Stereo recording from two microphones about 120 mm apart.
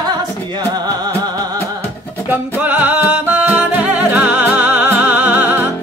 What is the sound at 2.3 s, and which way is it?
Music, 15° right (ahead or behind).